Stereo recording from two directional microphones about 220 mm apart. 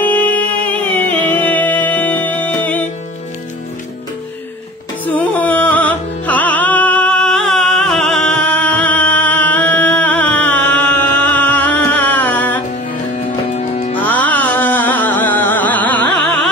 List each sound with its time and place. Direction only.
0.0 s music: 10° left (ahead or behind)
5.0 s music: 5° left (ahead or behind)
13.6 s music: 30° left (ahead or behind)
13.9 s music: 5° left (ahead or behind)